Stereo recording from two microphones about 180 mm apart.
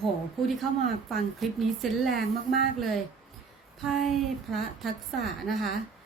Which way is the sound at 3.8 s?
Centre (ahead or behind).